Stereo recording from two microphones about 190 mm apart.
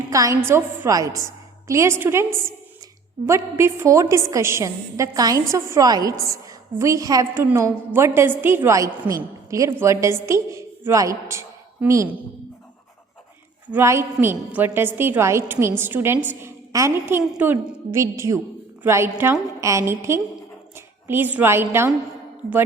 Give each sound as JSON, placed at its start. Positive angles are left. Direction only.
{"t": 0.1, "sound": "a woman's voice", "side_deg": -15}
{"t": 13.7, "sound": "a woman's voice", "side_deg": -10}